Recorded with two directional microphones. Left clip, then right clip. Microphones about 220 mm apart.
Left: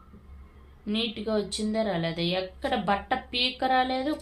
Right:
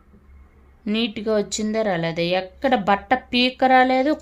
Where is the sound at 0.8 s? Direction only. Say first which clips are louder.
Right 7 dB; 45° right (ahead or behind).